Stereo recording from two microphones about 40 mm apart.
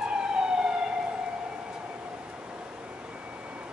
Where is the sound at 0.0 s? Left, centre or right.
Right.